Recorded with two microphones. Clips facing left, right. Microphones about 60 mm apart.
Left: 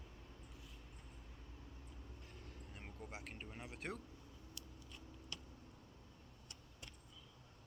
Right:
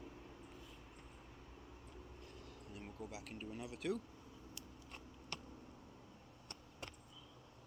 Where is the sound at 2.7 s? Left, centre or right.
Left.